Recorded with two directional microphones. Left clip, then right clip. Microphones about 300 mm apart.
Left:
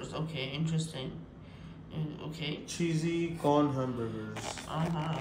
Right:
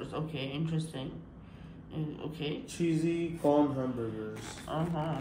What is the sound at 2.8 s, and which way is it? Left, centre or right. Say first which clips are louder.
Music: right 3 dB; left.